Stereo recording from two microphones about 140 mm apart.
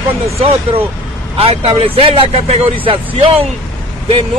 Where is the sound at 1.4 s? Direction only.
45° right (ahead or behind).